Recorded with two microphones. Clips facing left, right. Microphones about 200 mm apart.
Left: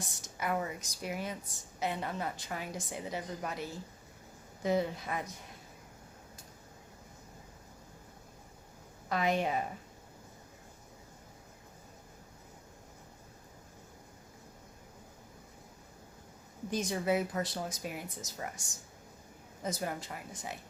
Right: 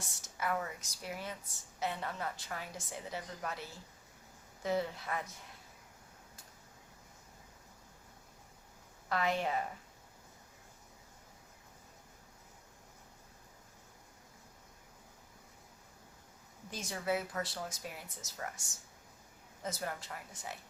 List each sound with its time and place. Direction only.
0.0 s speech: 15° left (ahead or behind)
9.0 s speech: 15° left (ahead or behind)
16.6 s speech: 15° left (ahead or behind)